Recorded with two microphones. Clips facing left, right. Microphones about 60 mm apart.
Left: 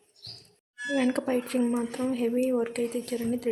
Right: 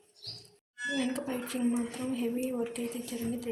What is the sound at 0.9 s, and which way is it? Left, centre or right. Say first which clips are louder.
A woman's voice: left 8 dB; left.